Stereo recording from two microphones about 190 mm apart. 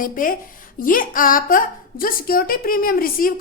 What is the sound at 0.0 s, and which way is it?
A woman's voice, 45° left (ahead or behind).